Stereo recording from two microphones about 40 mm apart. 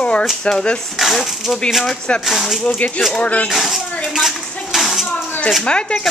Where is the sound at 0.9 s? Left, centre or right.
Centre.